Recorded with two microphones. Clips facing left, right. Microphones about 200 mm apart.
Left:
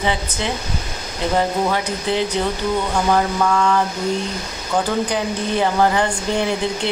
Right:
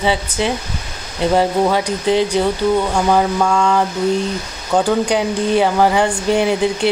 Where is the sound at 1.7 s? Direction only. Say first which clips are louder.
Right 5 dB; 15° right (ahead or behind).